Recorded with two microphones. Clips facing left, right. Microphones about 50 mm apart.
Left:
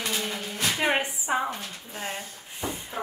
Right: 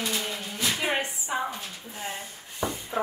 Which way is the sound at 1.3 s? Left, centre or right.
Left.